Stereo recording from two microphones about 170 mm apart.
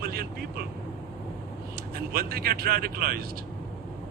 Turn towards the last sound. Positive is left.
turn(degrees=-60)  # may be behind; listen again after turning